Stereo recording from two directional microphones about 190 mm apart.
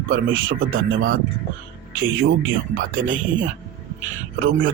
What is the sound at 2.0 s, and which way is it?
Speech, 90° right.